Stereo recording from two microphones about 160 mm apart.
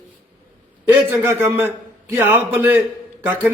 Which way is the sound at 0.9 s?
10° right (ahead or behind).